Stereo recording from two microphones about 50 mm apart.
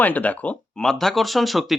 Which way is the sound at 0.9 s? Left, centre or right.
Centre.